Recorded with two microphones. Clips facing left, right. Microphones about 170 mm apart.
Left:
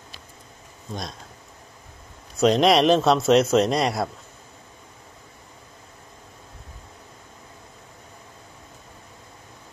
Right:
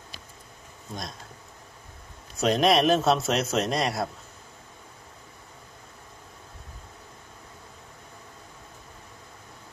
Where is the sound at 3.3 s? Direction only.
30° left (ahead or behind).